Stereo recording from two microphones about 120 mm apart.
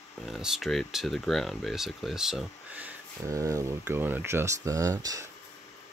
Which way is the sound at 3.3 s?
25° right (ahead or behind).